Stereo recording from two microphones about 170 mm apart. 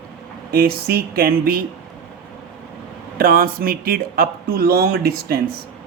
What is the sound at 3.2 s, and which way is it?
Speech, 60° right (ahead or behind).